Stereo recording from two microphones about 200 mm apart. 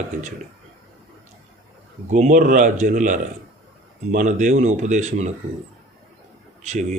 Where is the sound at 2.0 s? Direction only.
35° right (ahead or behind).